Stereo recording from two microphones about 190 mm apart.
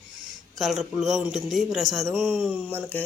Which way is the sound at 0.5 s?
Centre (ahead or behind).